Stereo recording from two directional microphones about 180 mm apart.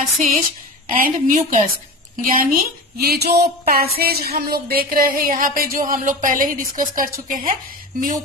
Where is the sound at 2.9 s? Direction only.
60° right (ahead or behind).